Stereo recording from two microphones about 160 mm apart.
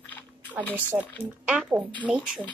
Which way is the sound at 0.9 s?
5° right (ahead or behind).